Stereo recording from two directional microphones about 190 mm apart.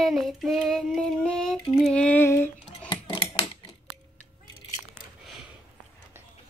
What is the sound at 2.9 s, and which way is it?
Typewriter, 25° left (ahead or behind).